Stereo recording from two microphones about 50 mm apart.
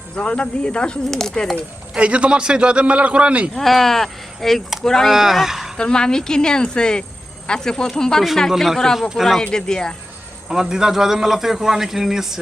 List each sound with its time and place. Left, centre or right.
0.2 s speech: left
2.0 s a man's voice: right
3.5 s speech: centre
5.0 s speech: centre
5.7 s speech: centre
8.4 s speech: centre
9.4 s speech: centre
10.5 s a man's voice: centre